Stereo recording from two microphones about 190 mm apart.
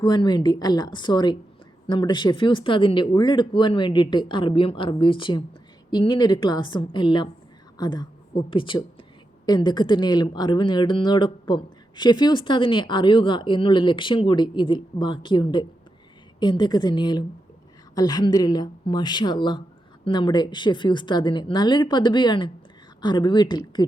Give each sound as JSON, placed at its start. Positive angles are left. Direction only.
{"t": 0.0, "sound": "a woman's voice", "side_deg": 20}